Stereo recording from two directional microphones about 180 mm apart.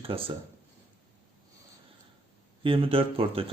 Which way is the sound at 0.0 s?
30° right (ahead or behind).